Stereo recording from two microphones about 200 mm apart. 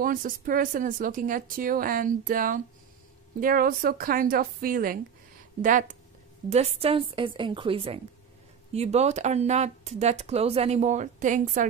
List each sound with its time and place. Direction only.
0.0 s a woman's voice: 45° right (ahead or behind)